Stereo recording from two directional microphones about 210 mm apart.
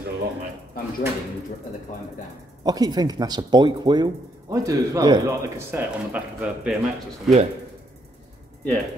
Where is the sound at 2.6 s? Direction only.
20° right (ahead or behind).